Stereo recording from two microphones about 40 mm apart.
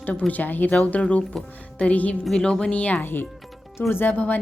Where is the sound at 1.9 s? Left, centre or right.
Left.